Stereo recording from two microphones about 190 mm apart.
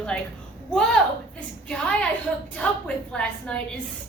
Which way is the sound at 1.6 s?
5° left (ahead or behind).